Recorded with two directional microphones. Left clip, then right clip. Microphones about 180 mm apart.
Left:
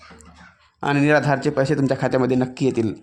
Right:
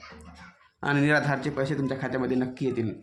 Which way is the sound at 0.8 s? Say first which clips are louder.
Left 6 dB; 25° left (ahead or behind).